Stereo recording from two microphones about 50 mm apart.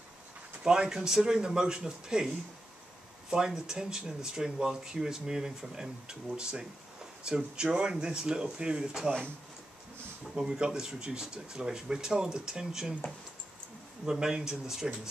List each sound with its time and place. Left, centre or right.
0.7 s speech: centre
10.3 s speech: centre
14.3 s speech: centre